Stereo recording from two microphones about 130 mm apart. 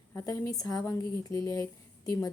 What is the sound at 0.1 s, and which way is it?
A woman's voice, 20° left (ahead or behind).